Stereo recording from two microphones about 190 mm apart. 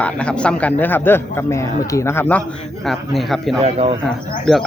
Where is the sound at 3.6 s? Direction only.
35° right (ahead or behind).